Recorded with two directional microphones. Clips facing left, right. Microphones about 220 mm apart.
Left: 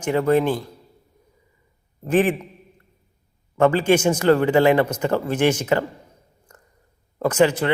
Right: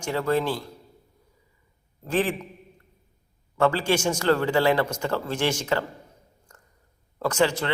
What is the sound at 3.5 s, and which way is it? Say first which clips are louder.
A man's voice: left 6 dB; 20° left (ahead or behind).